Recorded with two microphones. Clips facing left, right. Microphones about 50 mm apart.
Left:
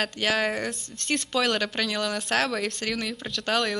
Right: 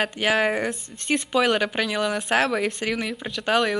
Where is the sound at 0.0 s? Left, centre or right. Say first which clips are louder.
Right 4 dB; centre.